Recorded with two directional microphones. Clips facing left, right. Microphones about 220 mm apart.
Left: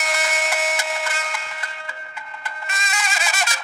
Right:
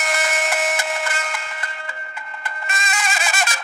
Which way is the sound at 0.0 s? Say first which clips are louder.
Right 2 dB; 50° right (ahead or behind).